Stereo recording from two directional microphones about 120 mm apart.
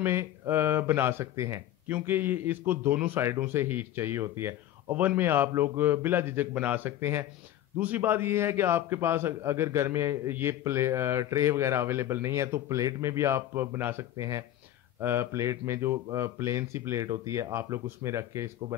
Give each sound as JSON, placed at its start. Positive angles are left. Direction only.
{"t": 0.0, "sound": "a man's voice", "side_deg": -20}